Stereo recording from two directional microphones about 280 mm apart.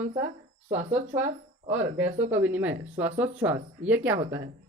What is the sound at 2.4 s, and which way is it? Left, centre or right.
Speech, centre.